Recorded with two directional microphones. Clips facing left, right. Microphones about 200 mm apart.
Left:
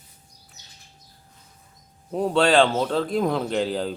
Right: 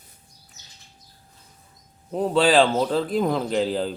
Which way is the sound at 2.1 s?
Centre (ahead or behind).